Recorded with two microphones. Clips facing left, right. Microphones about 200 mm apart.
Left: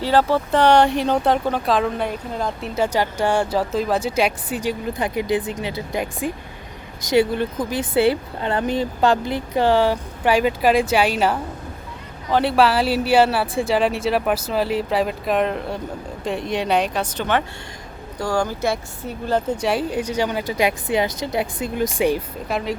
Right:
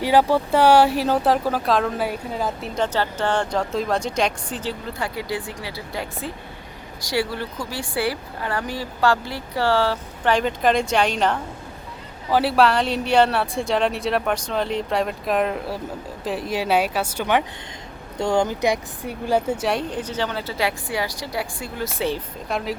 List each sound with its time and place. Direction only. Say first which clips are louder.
0.0 s speech: even; 15° right (ahead or behind)
18.2 s speech: right 2 dB; 20° right (ahead or behind)
19.6 s a woman's voice: left 3 dB; 5° left (ahead or behind)
22.4 s speech: left 1 dB; centre (ahead or behind)